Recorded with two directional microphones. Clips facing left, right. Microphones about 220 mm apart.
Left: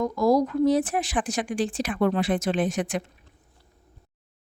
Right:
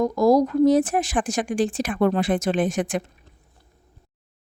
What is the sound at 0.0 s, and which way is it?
Speech, 40° right (ahead or behind).